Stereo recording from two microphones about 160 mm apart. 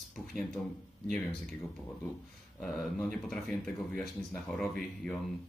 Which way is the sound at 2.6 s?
Centre (ahead or behind).